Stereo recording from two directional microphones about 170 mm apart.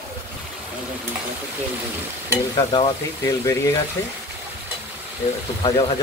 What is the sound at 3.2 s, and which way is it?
Speech, 20° left (ahead or behind).